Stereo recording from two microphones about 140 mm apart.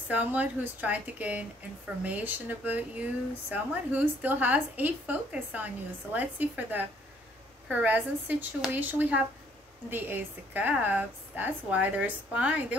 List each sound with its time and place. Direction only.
0.1 s speech: 10° right (ahead or behind)